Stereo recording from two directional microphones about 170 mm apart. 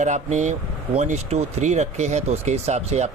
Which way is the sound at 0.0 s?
45° right (ahead or behind).